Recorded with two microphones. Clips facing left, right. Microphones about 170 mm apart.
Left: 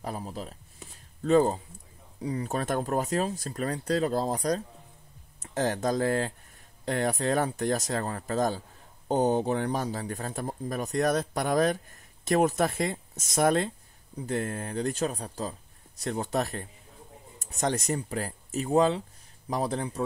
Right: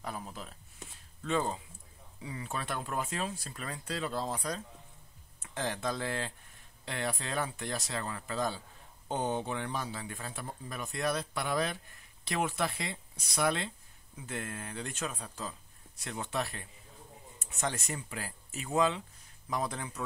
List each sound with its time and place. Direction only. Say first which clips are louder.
0.0 s speech: left 6 dB; 35° left (ahead or behind)